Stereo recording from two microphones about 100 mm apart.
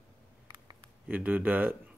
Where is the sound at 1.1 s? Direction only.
15° right (ahead or behind).